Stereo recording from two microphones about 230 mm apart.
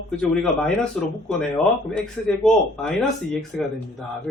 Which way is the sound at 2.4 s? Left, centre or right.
Centre.